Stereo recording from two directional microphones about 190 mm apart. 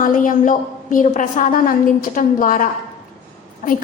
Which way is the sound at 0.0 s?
45° left (ahead or behind).